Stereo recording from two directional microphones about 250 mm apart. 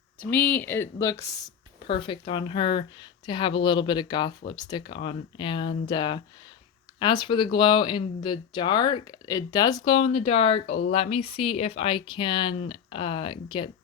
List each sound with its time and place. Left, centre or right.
0.2 s speech: centre; by 13.3 s left